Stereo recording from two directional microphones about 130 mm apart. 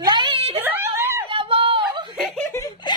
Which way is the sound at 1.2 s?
40° right (ahead or behind).